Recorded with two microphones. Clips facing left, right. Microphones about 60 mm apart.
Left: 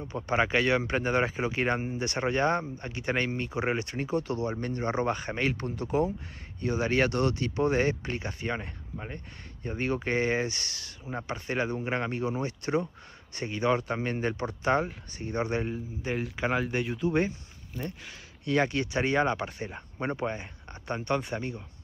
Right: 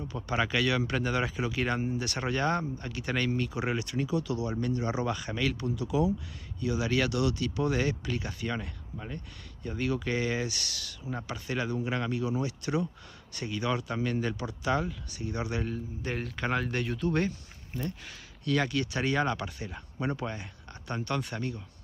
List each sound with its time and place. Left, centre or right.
0.1 s speech: left
15.7 s speech: centre